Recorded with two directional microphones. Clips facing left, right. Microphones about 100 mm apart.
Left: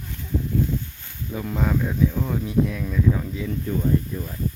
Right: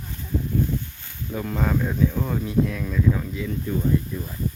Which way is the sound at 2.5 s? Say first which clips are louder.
Even; 10° left (ahead or behind).